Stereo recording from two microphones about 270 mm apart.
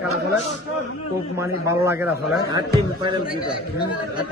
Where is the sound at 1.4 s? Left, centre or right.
Centre.